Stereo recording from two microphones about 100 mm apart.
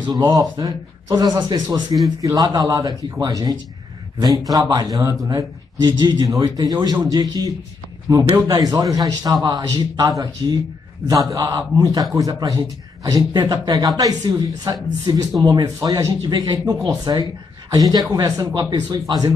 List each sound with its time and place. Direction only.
0.1 s a man's voice: 40° right (ahead or behind)
6.4 s a man's voice: 40° right (ahead or behind)